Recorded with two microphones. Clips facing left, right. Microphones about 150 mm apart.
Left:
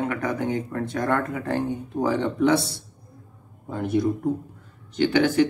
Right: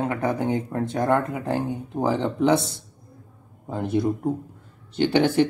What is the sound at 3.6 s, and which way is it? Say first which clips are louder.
Speech: even; 20° right (ahead or behind).